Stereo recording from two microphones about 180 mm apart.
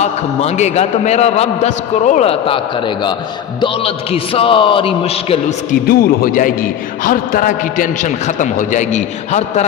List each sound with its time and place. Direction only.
0.0 s a man's voice: 40° left (ahead or behind)
5.9 s a man's voice: 55° left (ahead or behind)